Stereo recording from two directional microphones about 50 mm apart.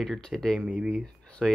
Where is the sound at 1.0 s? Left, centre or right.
Centre.